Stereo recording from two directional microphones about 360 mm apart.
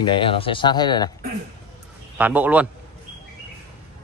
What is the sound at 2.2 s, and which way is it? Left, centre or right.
Speech, centre.